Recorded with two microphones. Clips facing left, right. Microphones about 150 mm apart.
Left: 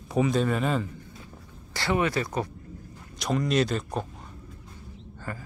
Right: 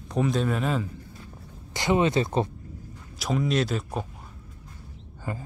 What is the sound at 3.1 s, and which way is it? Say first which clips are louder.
Speech: even; 5° right (ahead or behind).